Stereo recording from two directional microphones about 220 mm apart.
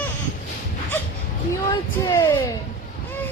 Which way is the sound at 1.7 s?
15° left (ahead or behind).